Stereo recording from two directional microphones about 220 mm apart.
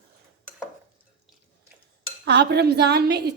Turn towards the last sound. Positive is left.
turn(degrees=-50)  # may be behind; listen again after turning